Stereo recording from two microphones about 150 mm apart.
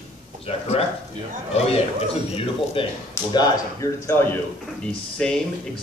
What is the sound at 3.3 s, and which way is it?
Speech, 25° left (ahead or behind).